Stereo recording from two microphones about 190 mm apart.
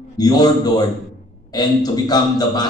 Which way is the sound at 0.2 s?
20° left (ahead or behind).